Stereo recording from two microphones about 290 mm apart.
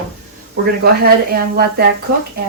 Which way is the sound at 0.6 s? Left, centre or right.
Right.